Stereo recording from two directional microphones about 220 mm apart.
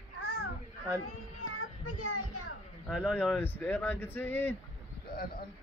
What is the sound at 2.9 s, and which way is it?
Speech, 5° right (ahead or behind).